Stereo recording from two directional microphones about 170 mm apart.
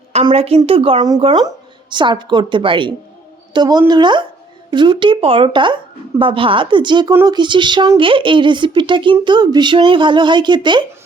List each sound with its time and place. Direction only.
0.1 s a woman's voice: 35° right (ahead or behind)
7.1 s speech: 15° right (ahead or behind)
7.3 s speech: 25° right (ahead or behind)